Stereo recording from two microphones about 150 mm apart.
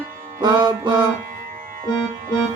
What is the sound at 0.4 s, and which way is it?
Music, 30° right (ahead or behind).